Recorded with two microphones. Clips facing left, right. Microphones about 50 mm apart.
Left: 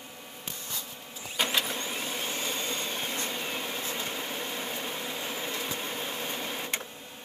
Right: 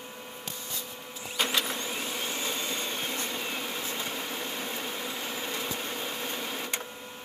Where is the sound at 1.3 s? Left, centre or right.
Centre.